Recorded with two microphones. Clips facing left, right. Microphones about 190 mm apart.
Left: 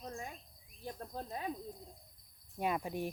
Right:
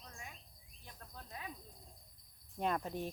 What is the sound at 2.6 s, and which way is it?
Speech, 10° left (ahead or behind).